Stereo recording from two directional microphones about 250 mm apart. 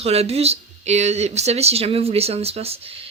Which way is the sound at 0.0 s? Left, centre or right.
Right.